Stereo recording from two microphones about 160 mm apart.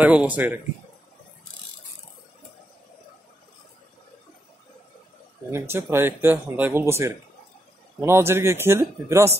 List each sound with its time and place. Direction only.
0.0 s speech: 10° right (ahead or behind)
5.5 s speech: 15° right (ahead or behind)